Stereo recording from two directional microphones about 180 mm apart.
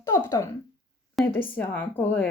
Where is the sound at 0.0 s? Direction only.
20° left (ahead or behind).